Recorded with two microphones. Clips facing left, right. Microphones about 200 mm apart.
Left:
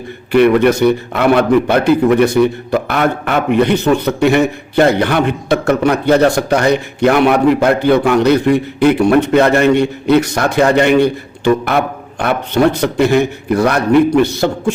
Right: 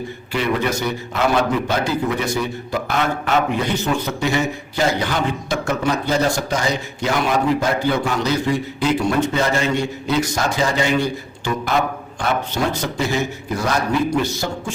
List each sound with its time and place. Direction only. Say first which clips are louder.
0.3 s a man's voice: left 12 dB; 60° left (ahead or behind)